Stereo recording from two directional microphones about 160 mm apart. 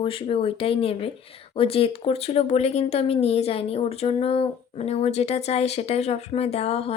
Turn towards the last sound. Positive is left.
turn(degrees=40)  # may be behind; listen again after turning